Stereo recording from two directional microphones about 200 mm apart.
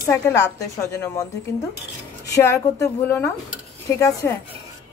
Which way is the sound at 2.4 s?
15° left (ahead or behind).